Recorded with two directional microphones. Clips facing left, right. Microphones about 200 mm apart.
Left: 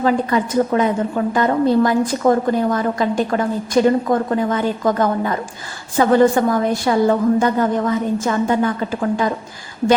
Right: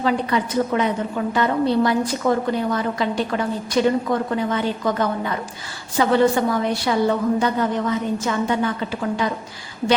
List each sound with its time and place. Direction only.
0.0 s a woman's voice: 45° left (ahead or behind)